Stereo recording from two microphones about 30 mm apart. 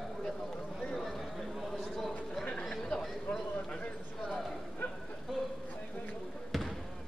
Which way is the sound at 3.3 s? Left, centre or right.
Left.